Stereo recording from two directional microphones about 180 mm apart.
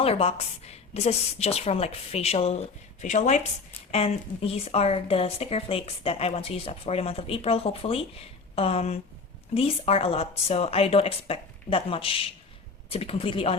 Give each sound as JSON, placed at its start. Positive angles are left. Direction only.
{"t": 0.0, "sound": "speech", "side_deg": 35}